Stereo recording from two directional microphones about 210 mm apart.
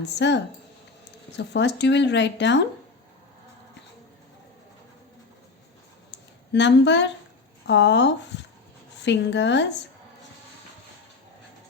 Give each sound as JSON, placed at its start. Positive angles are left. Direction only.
{"t": 0.0, "sound": "speech", "side_deg": 55}
{"t": 6.1, "sound": "a sound", "side_deg": 55}
{"t": 7.7, "sound": "speech", "side_deg": 55}